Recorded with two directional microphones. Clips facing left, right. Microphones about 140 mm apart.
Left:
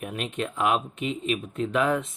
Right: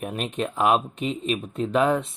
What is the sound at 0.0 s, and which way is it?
Speech, 35° right (ahead or behind).